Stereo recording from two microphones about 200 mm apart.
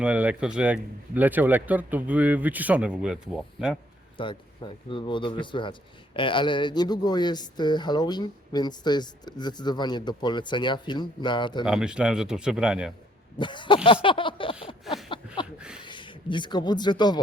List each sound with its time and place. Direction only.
0.0 s speech: 5° right (ahead or behind)
4.2 s speech: 25° left (ahead or behind)
11.6 s speech: 5° right (ahead or behind)
13.4 s speech: 25° left (ahead or behind)
15.5 s a sound: 5° right (ahead or behind)
15.8 s speech: 25° left (ahead or behind)